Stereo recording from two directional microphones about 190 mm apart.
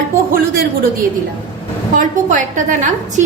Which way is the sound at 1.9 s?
45° right (ahead or behind).